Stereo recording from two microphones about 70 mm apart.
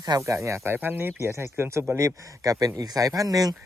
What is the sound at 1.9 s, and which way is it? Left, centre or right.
Speech, right.